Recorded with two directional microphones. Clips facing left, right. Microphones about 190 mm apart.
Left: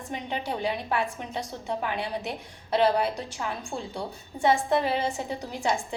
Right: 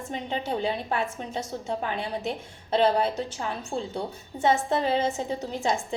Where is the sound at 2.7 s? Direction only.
25° right (ahead or behind).